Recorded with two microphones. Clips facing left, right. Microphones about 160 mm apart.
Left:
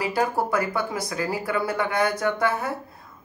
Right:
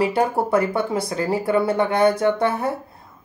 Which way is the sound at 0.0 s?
25° right (ahead or behind).